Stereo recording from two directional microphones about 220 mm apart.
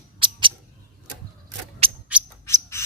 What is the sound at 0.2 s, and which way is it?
Mouse, 20° right (ahead or behind).